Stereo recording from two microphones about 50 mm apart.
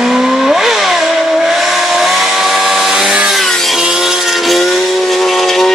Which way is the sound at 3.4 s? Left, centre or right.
Centre.